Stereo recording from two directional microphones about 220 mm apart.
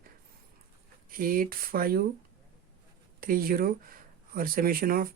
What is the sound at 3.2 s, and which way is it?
Speech, 40° right (ahead or behind).